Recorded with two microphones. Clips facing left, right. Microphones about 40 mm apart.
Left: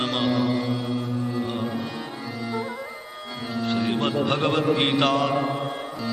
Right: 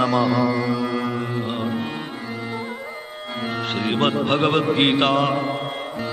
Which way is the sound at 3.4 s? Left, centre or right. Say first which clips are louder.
Even; right.